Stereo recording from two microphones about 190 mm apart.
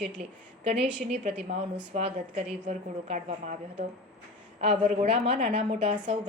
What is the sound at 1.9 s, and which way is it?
A woman's voice, 35° right (ahead or behind).